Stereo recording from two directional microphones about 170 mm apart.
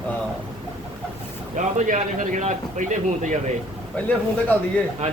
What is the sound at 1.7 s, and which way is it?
A man's voice, 45° right (ahead or behind).